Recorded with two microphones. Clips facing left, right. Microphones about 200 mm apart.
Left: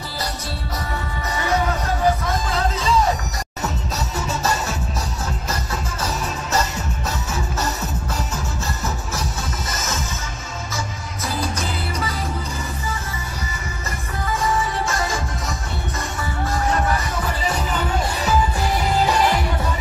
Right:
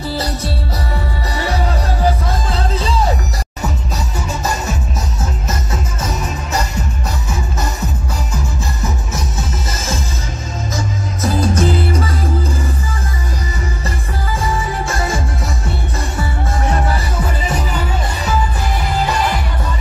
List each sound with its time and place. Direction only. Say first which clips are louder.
1.3 s music: even; 35° right (ahead or behind)
4.3 s music: right 2 dB; 15° right (ahead or behind)
9.7 s music: right 3 dB; 30° right (ahead or behind)
11.2 s music: right 10 dB; 50° right (ahead or behind)
13.8 s music: right 3 dB; 30° right (ahead or behind)
16.7 s music: right 2 dB; 30° right (ahead or behind)